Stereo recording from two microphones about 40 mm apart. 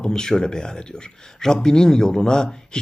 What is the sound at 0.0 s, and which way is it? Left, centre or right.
Speech, centre.